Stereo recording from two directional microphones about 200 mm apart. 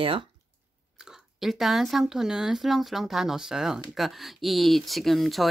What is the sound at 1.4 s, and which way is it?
Speech, centre (ahead or behind).